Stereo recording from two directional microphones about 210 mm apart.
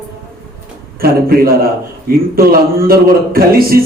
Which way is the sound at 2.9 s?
45° right (ahead or behind).